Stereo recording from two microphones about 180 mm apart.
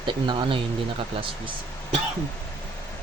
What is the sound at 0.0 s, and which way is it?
Speech, 25° right (ahead or behind).